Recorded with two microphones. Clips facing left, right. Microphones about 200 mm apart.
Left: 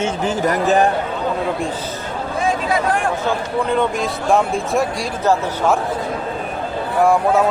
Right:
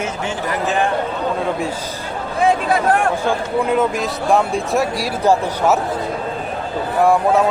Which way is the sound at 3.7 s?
5° right (ahead or behind).